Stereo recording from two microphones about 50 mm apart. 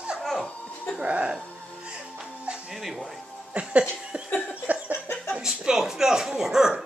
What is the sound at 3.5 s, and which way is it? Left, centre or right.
Speech, right.